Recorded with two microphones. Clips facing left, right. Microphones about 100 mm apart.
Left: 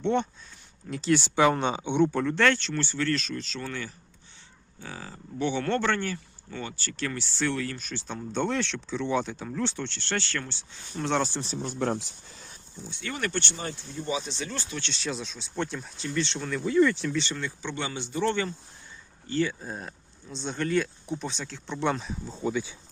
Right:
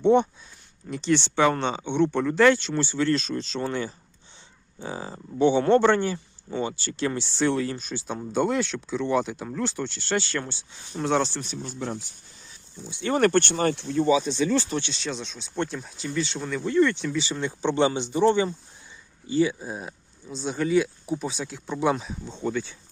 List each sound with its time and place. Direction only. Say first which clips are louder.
0.0 s speech: right 7 dB; 15° right (ahead or behind)
0.9 s speech: right 1 dB; centre (ahead or behind)
2.1 s speech: right 5 dB; 5° right (ahead or behind)
10.9 s speech: right 3 dB; 5° right (ahead or behind)
11.3 s speech: left 1 dB; 30° left (ahead or behind)
11.6 s speech: left 6 dB; 60° left (ahead or behind); by 12.5 s 90° left
12.8 s speech: right 5 dB; 20° right (ahead or behind)
13.1 s speech: right 12 dB; 50° right (ahead or behind); by 14.1 s 80° right
14.9 s speech: right 1 dB; centre (ahead or behind)
17.6 s speech: right 11 dB; 30° right (ahead or behind); by 22.8 s 10° left (ahead or behind)